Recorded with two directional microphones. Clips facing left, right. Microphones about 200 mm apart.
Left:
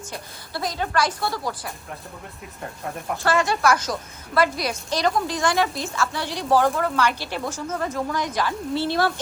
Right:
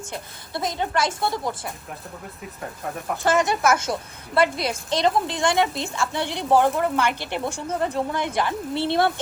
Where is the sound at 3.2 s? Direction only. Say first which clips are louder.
Right 1 dB; 20° right (ahead or behind).